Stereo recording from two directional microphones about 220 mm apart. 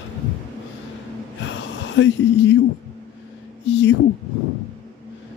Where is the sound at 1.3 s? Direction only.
55° left (ahead or behind).